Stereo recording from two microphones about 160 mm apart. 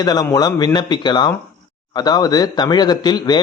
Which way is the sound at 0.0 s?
25° left (ahead or behind).